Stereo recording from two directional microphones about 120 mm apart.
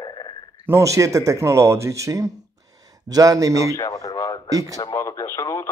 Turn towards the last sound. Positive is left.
turn(degrees=25)  # may be behind; listen again after turning